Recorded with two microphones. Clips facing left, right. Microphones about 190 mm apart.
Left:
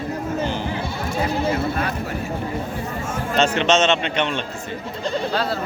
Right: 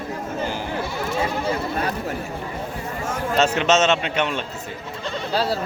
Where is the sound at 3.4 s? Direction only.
5° right (ahead or behind).